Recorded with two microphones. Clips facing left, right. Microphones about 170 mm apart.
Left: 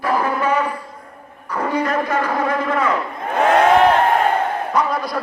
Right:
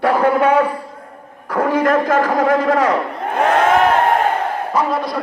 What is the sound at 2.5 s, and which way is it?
Speech, 85° right.